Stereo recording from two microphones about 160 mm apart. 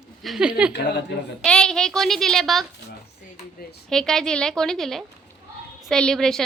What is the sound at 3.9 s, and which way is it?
A woman's voice, 5° left (ahead or behind).